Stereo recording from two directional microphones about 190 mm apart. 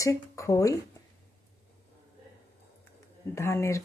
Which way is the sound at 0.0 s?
15° left (ahead or behind).